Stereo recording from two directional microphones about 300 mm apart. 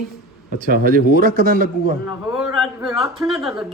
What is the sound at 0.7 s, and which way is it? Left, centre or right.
A man's voice, right.